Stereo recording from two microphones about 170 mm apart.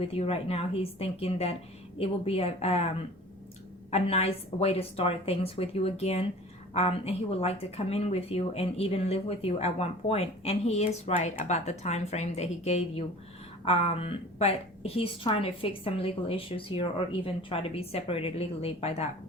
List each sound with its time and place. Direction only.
0.0 s speech: 35° left (ahead or behind)
3.9 s speech: 35° left (ahead or behind)